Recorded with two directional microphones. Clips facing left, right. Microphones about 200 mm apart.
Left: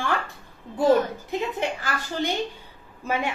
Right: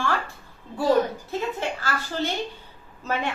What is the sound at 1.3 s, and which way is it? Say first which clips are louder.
A woman's voice: left 1 dB; 15° left (ahead or behind).